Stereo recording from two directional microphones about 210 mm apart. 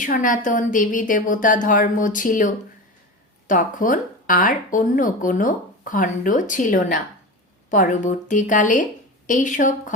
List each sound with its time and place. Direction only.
0.0 s speech: 40° left (ahead or behind)